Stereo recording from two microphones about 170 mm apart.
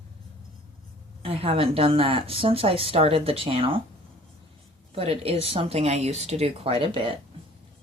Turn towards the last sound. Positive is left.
turn(degrees=-30)  # may be behind; listen again after turning